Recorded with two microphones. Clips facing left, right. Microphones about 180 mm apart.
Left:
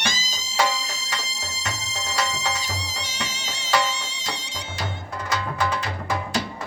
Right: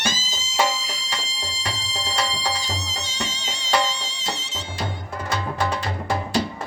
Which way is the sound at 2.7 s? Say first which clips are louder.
Right 2 dB; 10° left (ahead or behind).